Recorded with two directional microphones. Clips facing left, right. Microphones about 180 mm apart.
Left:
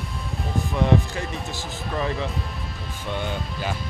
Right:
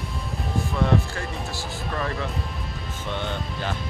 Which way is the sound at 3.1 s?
5° left (ahead or behind).